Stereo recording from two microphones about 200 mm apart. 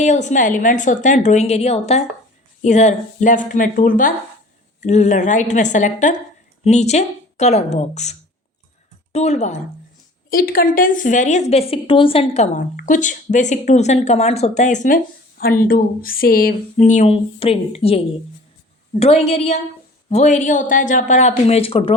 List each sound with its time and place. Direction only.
0.0 s a woman's voice: 35° left (ahead or behind)
9.1 s a woman's voice: 35° left (ahead or behind)
10.2 s a woman's voice: 45° left (ahead or behind); by 21.9 s 30° left (ahead or behind)